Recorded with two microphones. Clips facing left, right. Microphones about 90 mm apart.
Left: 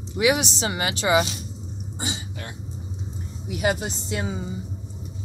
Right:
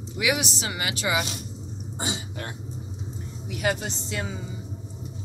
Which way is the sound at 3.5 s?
15° left (ahead or behind).